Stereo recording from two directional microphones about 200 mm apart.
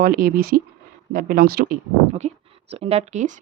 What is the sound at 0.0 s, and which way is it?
Speech, 45° right (ahead or behind).